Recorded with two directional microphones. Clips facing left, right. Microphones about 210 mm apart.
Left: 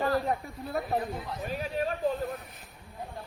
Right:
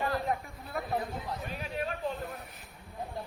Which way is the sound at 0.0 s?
35° left (ahead or behind).